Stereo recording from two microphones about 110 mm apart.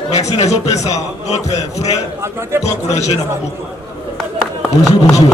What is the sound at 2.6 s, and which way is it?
Speech, 90° left.